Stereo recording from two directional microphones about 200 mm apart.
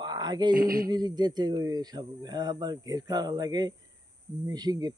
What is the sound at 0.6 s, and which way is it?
Speech, 45° right (ahead or behind).